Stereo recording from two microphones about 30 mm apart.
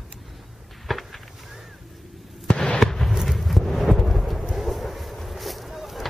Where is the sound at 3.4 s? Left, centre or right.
Centre.